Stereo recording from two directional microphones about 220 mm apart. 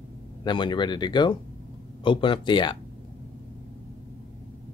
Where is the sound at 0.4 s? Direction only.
20° left (ahead or behind).